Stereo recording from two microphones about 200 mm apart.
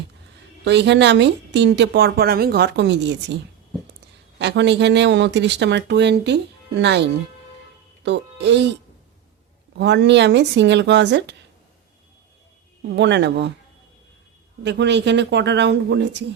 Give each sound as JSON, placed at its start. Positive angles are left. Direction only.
{"t": 0.6, "sound": "speech", "side_deg": -60}
{"t": 4.4, "sound": "speech", "side_deg": -60}
{"t": 9.7, "sound": "speech", "side_deg": -60}
{"t": 12.9, "sound": "speech", "side_deg": -60}
{"t": 14.6, "sound": "speech", "side_deg": -60}